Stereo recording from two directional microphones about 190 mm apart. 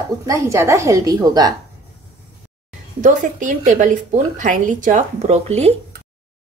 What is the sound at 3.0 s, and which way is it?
A woman's voice, 40° right (ahead or behind).